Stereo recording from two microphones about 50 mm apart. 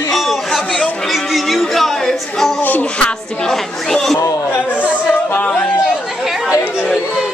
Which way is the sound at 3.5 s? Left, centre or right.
Centre.